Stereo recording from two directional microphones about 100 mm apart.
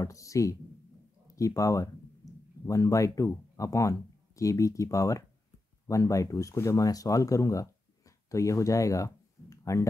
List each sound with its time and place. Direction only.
0.0 s speech: 30° left (ahead or behind)
1.2 s a sound: 35° left (ahead or behind)
3.5 s speech: 35° left (ahead or behind)